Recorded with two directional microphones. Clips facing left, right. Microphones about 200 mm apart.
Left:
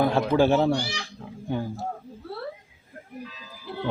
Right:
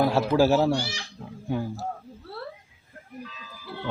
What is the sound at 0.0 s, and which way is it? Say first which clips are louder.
Speech: even; 5° right (ahead or behind).